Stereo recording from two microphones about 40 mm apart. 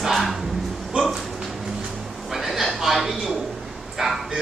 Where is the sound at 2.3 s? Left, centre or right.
Centre.